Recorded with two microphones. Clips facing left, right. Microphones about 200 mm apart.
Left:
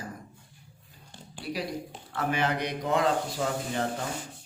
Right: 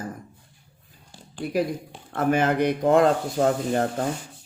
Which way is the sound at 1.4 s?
50° right (ahead or behind).